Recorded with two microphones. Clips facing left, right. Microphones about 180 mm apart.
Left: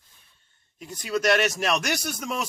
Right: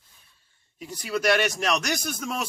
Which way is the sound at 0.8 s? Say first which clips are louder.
Left 1 dB; 5° right (ahead or behind).